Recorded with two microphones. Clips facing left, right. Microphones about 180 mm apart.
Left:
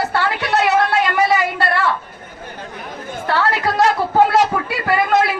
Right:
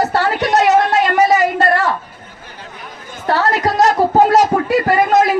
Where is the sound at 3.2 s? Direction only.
40° right (ahead or behind).